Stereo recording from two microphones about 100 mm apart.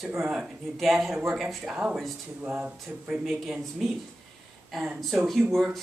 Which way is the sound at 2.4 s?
20° right (ahead or behind).